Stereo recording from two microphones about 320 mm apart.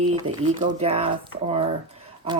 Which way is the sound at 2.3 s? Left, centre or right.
Centre.